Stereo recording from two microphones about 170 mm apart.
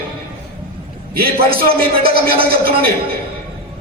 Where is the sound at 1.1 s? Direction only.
60° right (ahead or behind).